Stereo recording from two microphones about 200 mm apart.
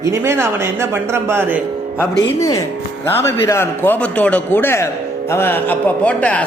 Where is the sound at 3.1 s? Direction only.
10° left (ahead or behind).